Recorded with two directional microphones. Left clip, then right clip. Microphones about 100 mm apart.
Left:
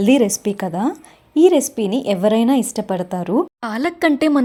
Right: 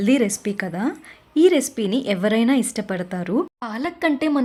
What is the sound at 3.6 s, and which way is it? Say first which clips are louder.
Speech: left 5 dB; 50° left (ahead or behind).